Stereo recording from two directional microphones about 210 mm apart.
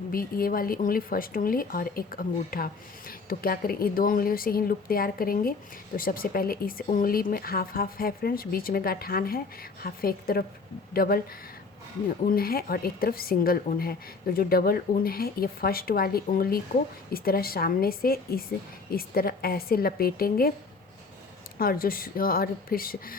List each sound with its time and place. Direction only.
0.1 s speech: 45° left (ahead or behind)
12.2 s speech: 45° left (ahead or behind)
21.6 s speech: 45° left (ahead or behind)